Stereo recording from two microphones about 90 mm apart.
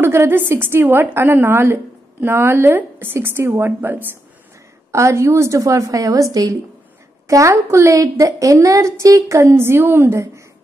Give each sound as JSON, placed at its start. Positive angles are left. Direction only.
{"t": 0.0, "sound": "a woman's voice", "side_deg": -30}
{"t": 4.9, "sound": "a woman's voice", "side_deg": -35}
{"t": 7.2, "sound": "a woman's voice", "side_deg": -35}